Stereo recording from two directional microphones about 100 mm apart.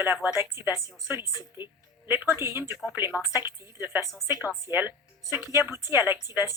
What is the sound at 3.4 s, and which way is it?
Speech, 25° right (ahead or behind).